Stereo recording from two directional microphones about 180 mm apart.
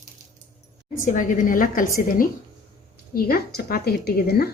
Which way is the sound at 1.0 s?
45° left (ahead or behind).